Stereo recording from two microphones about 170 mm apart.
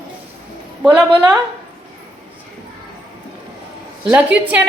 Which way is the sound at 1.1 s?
25° right (ahead or behind).